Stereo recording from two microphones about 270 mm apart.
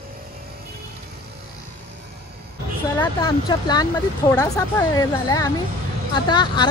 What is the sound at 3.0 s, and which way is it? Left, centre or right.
Speech, centre.